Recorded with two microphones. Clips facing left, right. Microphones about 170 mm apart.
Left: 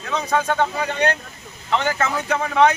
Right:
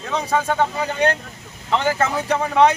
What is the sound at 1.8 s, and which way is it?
Speech, 30° right (ahead or behind).